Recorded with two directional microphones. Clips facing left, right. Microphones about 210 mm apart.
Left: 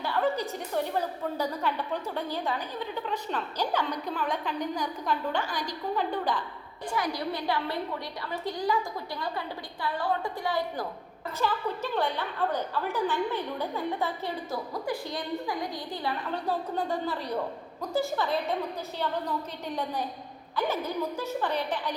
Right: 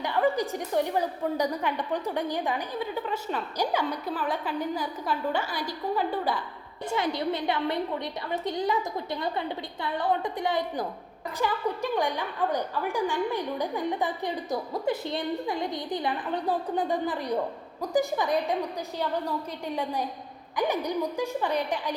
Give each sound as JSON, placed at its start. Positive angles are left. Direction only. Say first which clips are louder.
{"t": 0.0, "sound": "a woman's voice", "louder": "right 3 dB", "side_deg": -15}
{"t": 6.9, "sound": "a woman's voice", "louder": "right 3 dB", "side_deg": -25}